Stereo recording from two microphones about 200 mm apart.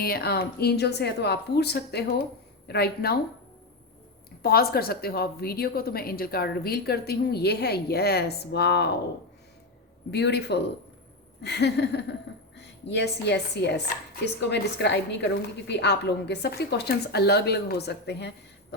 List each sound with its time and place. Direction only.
0.0 s a woman's voice: 50° left (ahead or behind)
4.4 s a woman's voice: 50° left (ahead or behind)
10.1 s a woman's voice: 55° left (ahead or behind)